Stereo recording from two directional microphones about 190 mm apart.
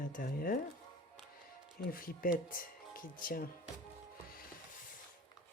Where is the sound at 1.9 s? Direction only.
50° left (ahead or behind).